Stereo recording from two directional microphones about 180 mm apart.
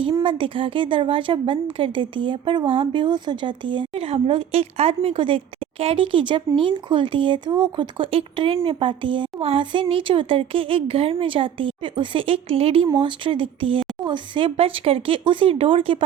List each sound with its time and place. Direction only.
0.0 s a woman's voice: 25° right (ahead or behind)